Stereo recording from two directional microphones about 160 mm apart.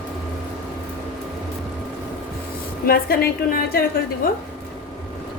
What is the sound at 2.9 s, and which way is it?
A woman's voice, 70° left (ahead or behind).